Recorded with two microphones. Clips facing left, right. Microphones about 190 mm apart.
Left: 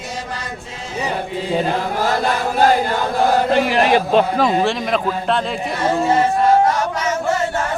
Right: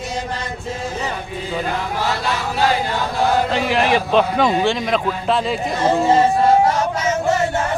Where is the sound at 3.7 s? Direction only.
Centre (ahead or behind).